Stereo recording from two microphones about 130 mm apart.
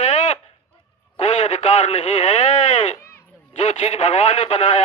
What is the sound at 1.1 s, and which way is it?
Speech, 60° left (ahead or behind).